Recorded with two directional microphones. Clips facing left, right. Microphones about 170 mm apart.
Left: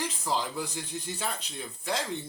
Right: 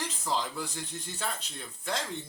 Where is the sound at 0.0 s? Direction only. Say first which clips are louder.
Left 2 dB; 5° left (ahead or behind).